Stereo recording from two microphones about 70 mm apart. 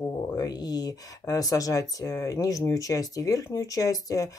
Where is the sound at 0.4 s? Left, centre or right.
Left.